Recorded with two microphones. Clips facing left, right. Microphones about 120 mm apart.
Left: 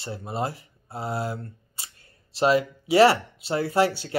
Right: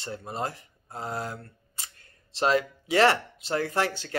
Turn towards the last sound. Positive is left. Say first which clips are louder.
# left 5 dB
turn(degrees=10)  # may be behind; listen again after turning